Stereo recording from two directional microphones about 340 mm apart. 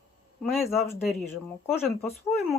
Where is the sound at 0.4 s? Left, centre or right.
Centre.